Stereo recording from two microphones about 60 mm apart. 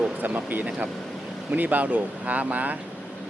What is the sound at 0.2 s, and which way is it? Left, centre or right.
Speech, right.